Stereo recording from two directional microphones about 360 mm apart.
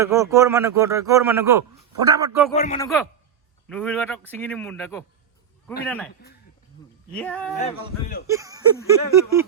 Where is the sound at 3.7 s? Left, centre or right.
Centre.